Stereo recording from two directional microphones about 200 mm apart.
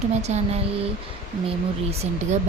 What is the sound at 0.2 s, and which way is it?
Speech, 35° right (ahead or behind).